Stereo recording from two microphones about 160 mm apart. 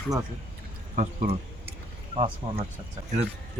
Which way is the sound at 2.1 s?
35° right (ahead or behind).